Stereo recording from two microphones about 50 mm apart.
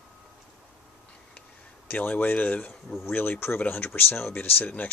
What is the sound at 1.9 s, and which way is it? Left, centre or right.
Speech, left.